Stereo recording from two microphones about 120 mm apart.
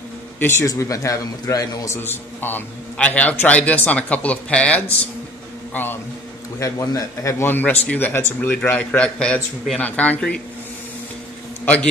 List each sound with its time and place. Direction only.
0.4 s a man's voice: 20° left (ahead or behind)
2.0 s a man's voice: 15° left (ahead or behind)
6.6 s a man's voice: 30° left (ahead or behind); by 10.4 s 10° left (ahead or behind)
11.6 s a man's voice: 10° left (ahead or behind)